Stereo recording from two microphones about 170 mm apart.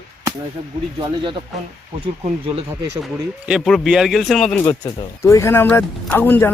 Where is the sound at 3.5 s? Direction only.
Centre (ahead or behind).